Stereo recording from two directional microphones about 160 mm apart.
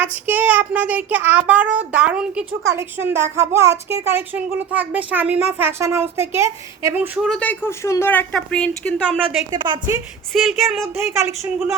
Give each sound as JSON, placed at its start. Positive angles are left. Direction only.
{"t": 0.0, "sound": "speech", "side_deg": -10}
{"t": 7.2, "sound": "speech", "side_deg": 5}
{"t": 9.2, "sound": "speech", "side_deg": -30}
{"t": 10.3, "sound": "speech", "side_deg": 0}
{"t": 10.9, "sound": "speech", "side_deg": -15}